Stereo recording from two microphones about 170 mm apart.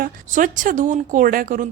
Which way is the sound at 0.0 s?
50° right (ahead or behind).